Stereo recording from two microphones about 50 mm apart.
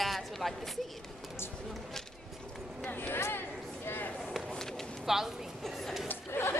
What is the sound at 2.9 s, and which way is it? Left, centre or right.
Speech, left.